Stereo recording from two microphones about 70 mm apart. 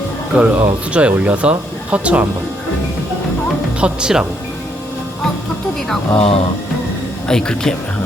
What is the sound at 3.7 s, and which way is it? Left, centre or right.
Speech, centre.